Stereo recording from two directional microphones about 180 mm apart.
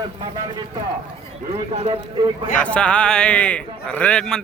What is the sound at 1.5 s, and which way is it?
Speech, 35° right (ahead or behind).